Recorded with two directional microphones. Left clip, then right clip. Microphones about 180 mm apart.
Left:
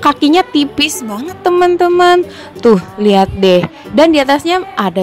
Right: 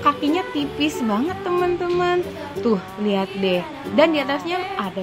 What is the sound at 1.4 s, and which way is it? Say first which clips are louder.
Music: left 16 dB; 50° left (ahead or behind).